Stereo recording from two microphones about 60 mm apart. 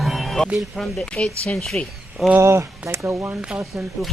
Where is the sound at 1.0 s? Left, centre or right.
Centre.